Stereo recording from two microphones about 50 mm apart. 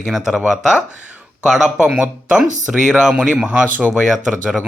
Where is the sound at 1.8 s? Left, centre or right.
Centre.